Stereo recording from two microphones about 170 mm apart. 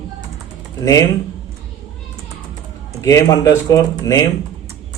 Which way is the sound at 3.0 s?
20° left (ahead or behind).